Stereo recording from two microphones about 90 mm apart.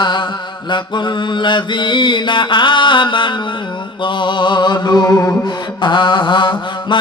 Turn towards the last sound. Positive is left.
turn(degrees=60)  # may be behind; listen again after turning